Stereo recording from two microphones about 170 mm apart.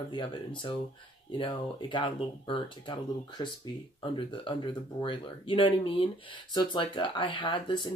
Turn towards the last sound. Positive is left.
turn(degrees=25)  # may be behind; listen again after turning